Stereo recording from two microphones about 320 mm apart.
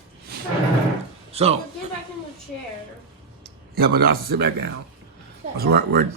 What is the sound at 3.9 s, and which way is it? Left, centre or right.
Speech, right.